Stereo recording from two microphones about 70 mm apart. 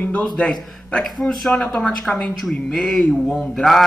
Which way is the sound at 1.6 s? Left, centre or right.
Centre.